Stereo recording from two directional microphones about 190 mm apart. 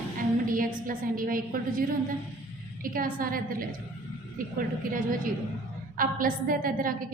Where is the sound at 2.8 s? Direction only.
50° right (ahead or behind).